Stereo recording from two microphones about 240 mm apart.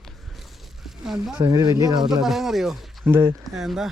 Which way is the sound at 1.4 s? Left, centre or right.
Centre.